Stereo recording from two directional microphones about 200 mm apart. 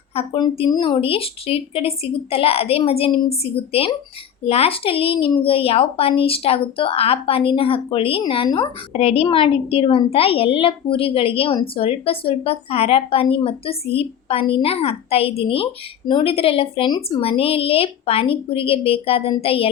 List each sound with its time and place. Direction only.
0.1 s a woman's voice: 30° left (ahead or behind)